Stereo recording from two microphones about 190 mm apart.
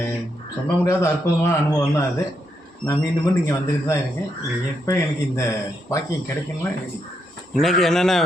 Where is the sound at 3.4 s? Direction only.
15° left (ahead or behind).